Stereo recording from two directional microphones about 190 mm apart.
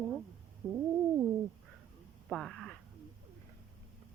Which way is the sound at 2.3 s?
5° left (ahead or behind).